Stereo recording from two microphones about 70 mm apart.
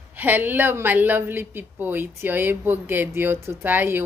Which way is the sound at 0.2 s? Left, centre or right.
Right.